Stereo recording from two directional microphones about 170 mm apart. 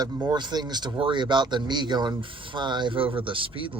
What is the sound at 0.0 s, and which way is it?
Speech, 25° right (ahead or behind).